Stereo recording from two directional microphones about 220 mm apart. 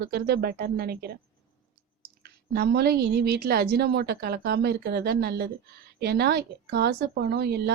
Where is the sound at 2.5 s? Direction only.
45° right (ahead or behind).